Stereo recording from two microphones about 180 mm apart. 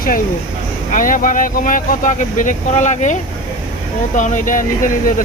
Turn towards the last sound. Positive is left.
turn(degrees=50)  # may be behind; listen again after turning